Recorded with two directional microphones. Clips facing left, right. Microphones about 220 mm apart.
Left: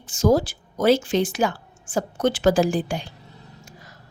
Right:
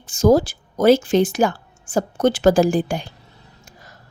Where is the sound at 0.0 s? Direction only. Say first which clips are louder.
Right 4 dB; 45° right (ahead or behind).